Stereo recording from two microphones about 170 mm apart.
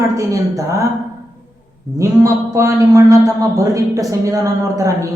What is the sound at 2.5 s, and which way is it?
A man's voice, 20° right (ahead or behind).